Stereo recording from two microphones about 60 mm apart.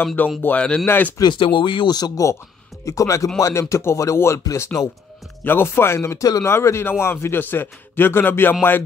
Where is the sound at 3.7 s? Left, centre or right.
Left.